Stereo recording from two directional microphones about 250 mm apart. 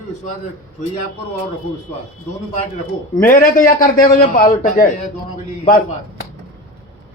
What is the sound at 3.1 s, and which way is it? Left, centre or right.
A man's voice, left.